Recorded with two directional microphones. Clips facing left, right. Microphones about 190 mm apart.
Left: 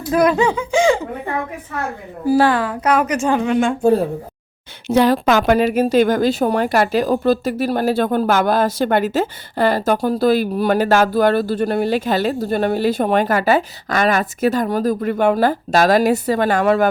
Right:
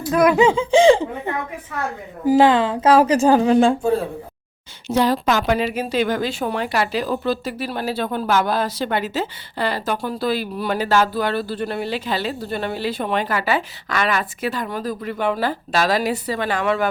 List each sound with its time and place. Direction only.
0.3 s speech: 25° right (ahead or behind)
2.2 s a woman's voice: 20° right (ahead or behind)
4.9 s a woman's voice: 60° left (ahead or behind)